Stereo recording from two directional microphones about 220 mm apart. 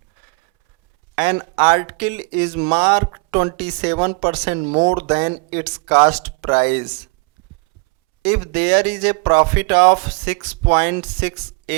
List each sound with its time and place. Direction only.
1.1 s speech: 15° right (ahead or behind)
2.6 s speech: 25° right (ahead or behind)
4.3 s speech: 10° right (ahead or behind)
4.6 s speech: 30° right (ahead or behind)
6.1 s speech: 10° right (ahead or behind)
6.5 s speech: 20° right (ahead or behind)
8.4 s speech: 15° right (ahead or behind)
9.2 s speech: 25° right (ahead or behind)
10.0 s speech: 10° right (ahead or behind)